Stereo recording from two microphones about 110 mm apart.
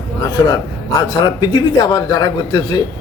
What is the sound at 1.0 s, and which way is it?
A man's voice, 45° left (ahead or behind).